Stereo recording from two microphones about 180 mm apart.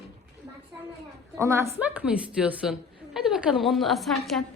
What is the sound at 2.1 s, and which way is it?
A woman's voice, 5° right (ahead or behind).